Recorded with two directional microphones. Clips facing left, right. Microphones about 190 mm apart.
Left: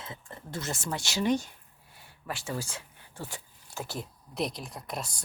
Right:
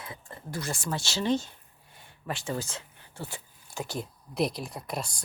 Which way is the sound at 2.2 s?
Centre (ahead or behind).